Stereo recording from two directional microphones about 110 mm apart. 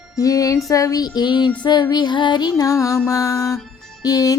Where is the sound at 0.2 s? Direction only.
30° left (ahead or behind).